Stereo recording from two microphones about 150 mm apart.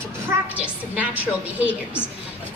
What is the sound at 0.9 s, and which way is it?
Speech, 10° right (ahead or behind).